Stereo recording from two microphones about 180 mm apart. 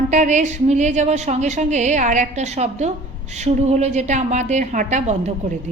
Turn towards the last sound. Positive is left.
turn(degrees=-40)  # may be behind; listen again after turning